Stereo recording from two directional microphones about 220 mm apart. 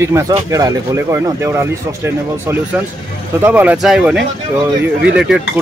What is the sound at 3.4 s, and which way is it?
A man's voice, 10° right (ahead or behind).